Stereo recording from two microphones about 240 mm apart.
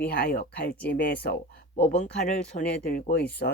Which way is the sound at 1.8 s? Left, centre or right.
Left.